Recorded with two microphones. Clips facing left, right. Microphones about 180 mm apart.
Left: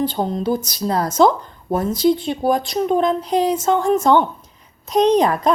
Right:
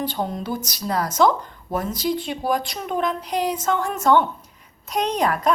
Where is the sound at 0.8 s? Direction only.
25° left (ahead or behind).